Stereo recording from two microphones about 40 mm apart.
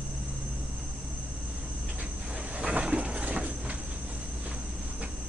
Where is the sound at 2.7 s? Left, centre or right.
Right.